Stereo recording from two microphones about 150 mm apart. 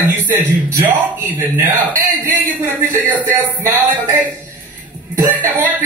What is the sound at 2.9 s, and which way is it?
Speech, 25° right (ahead or behind).